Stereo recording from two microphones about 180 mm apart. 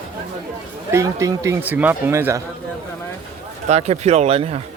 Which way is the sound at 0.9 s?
15° right (ahead or behind).